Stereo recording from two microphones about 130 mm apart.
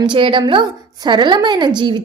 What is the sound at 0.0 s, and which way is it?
A woman's voice, 40° right (ahead or behind).